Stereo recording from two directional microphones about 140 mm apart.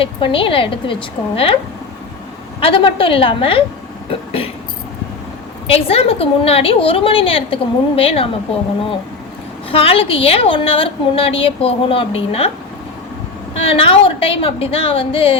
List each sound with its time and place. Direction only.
0.0 s a woman's voice: 40° left (ahead or behind)
2.6 s a woman's voice: 40° left (ahead or behind)
5.6 s a woman's voice: 45° left (ahead or behind)
9.7 s a woman's voice: 40° left (ahead or behind)
13.6 s a woman's voice: 40° left (ahead or behind)